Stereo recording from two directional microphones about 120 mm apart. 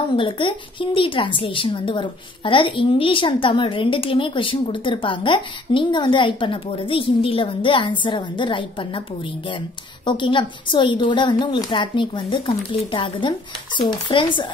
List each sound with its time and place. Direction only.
0.1 s a woman's voice: 45° left (ahead or behind)